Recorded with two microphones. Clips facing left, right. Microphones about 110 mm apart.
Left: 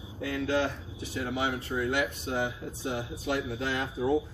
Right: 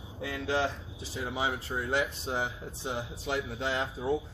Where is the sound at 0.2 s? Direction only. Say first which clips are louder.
Left 2 dB; 25° right (ahead or behind).